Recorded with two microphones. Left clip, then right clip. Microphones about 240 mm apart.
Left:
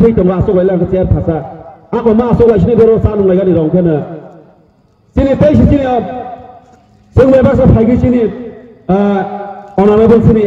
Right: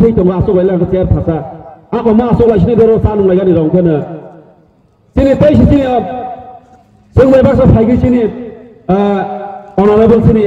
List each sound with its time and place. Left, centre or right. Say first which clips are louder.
0.0 s a man's voice: even; right
5.1 s a man's voice: right 1 dB; right
7.2 s a man's voice: even; right